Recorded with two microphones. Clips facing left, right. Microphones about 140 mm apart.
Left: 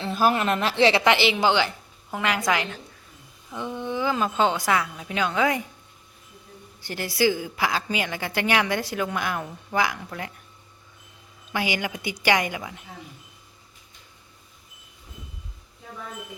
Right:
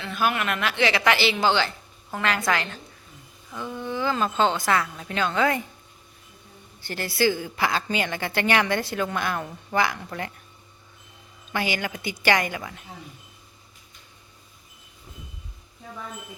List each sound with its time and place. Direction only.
0.0 s a woman's voice: 35° left (ahead or behind); by 5.6 s 10° left (ahead or behind)
6.8 s a woman's voice: 15° left (ahead or behind)
11.5 s a woman's voice: 15° left (ahead or behind)